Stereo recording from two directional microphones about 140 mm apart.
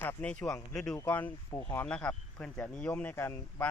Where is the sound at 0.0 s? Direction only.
10° left (ahead or behind).